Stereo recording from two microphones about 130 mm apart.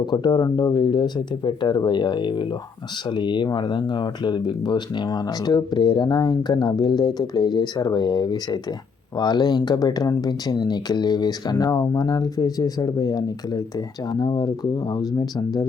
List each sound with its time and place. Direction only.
0.0 s speech: 35° left (ahead or behind)